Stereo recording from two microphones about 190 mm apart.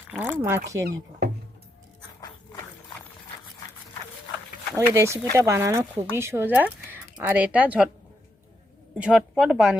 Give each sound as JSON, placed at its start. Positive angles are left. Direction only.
{"t": 0.1, "sound": "speech", "side_deg": -10}
{"t": 4.7, "sound": "speech", "side_deg": -10}
{"t": 9.0, "sound": "a woman's voice", "side_deg": -5}